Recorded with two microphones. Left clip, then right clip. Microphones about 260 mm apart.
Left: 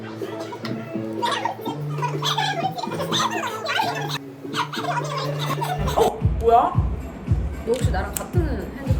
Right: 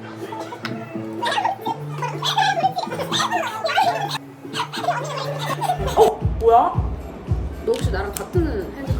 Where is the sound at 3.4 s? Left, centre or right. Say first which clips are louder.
Right 4 dB; centre.